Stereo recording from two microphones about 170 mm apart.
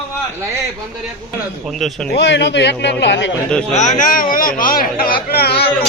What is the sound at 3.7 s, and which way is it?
Speech, 50° left (ahead or behind).